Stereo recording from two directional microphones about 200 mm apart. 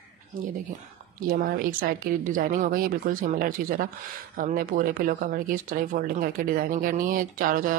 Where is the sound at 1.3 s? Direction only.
45° right (ahead or behind).